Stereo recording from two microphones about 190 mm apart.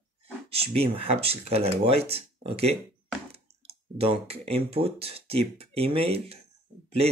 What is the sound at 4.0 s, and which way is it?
Speech, 30° right (ahead or behind).